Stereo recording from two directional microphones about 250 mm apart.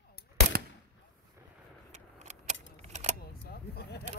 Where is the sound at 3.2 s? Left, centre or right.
Left.